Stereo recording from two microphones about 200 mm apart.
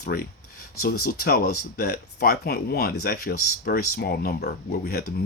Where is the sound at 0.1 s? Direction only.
50° left (ahead or behind).